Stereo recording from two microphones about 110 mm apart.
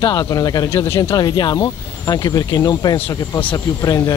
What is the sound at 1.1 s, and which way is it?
Speech, 35° left (ahead or behind).